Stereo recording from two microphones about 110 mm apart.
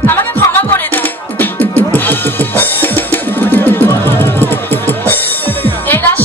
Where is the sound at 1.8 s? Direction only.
15° left (ahead or behind).